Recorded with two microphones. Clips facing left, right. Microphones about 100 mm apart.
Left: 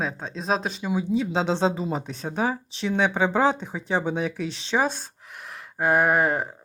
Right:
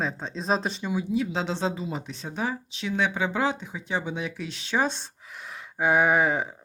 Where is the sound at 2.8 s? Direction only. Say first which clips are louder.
Left 4 dB; 35° left (ahead or behind).